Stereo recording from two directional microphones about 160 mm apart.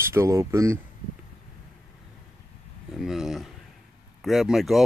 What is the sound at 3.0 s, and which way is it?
Speech, centre (ahead or behind).